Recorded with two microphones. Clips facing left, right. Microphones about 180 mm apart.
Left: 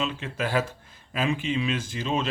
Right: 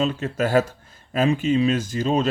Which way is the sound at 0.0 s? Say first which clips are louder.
Right 7 dB; 40° right (ahead or behind).